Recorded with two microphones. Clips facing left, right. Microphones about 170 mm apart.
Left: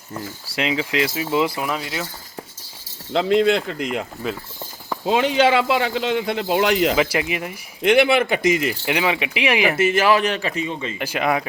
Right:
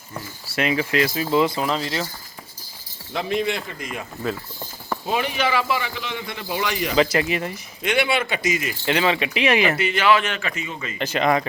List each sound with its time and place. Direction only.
0.5 s speech: 15° left (ahead or behind)
3.1 s a man's voice: 75° left (ahead or behind)
5.0 s a man's voice: 90° left; by 6.9 s 70° left (ahead or behind)
6.9 s speech: 10° left (ahead or behind)
7.8 s speech: 55° left (ahead or behind)
8.8 s speech: 15° left (ahead or behind)
9.7 s a man's voice: 45° left (ahead or behind)
10.9 s speech: 10° left (ahead or behind)